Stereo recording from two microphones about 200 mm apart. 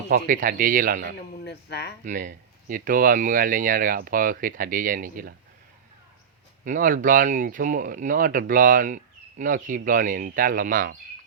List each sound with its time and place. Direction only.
0.1 s speech: 45° right (ahead or behind)
1.5 s speech: 55° left (ahead or behind)
2.0 s speech: 40° right (ahead or behind)
6.7 s speech: 45° right (ahead or behind)